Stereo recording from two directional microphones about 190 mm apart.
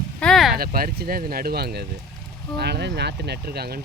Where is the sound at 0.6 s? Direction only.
50° right (ahead or behind).